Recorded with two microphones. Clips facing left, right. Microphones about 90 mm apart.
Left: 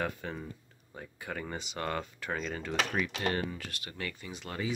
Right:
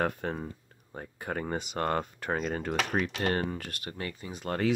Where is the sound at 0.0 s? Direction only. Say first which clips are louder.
Right 5 dB; 50° right (ahead or behind).